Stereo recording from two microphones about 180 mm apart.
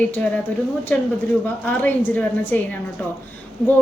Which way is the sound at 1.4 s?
10° left (ahead or behind).